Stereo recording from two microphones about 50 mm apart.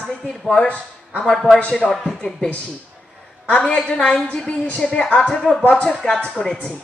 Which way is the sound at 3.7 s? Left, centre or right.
Left.